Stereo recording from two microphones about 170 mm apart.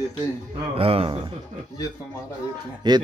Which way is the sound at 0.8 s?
35° right (ahead or behind).